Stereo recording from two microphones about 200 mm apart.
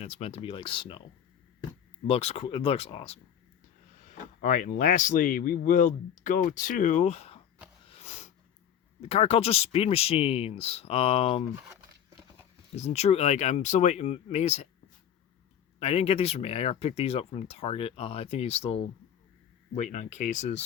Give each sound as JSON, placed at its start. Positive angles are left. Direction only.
{"t": 0.0, "sound": "speech", "side_deg": 30}
{"t": 2.0, "sound": "speech", "side_deg": 30}
{"t": 7.9, "sound": "a sound", "side_deg": 35}
{"t": 9.0, "sound": "speech", "side_deg": 30}
{"t": 11.5, "sound": "speech", "side_deg": -10}
{"t": 12.7, "sound": "speech", "side_deg": 30}
{"t": 15.8, "sound": "speech", "side_deg": 30}